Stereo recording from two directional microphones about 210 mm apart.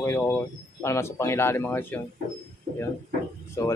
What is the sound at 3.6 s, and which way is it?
Speech, 15° left (ahead or behind).